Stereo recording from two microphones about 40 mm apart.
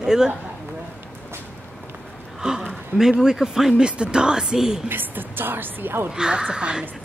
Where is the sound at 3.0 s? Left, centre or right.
Centre.